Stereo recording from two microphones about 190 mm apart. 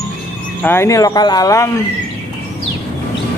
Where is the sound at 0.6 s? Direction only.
10° left (ahead or behind).